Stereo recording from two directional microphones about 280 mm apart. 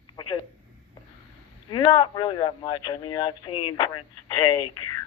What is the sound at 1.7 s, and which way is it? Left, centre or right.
Speech, centre.